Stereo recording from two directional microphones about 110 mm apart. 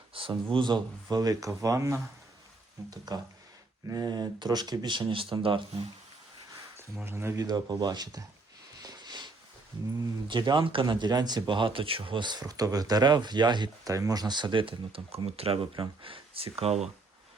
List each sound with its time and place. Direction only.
0.1 s speech: 55° right (ahead or behind); by 2.0 s 30° right (ahead or behind)
3.1 s speech: 40° right (ahead or behind)
7.0 s speech: 20° right (ahead or behind)
7.3 s speech: 35° right (ahead or behind)
8.8 s a sound: 40° right (ahead or behind)
10.2 s speech: 45° right (ahead or behind); by 16.9 s 75° right (ahead or behind)